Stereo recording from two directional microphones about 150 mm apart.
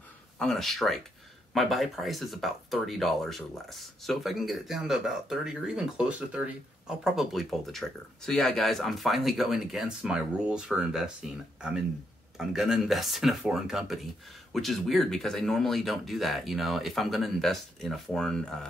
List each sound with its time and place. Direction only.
0.4 s speech: centre (ahead or behind)